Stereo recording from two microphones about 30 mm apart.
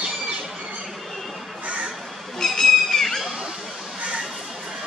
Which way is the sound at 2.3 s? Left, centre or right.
Centre.